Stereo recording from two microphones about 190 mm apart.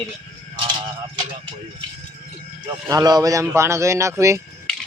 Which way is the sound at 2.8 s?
20° right (ahead or behind).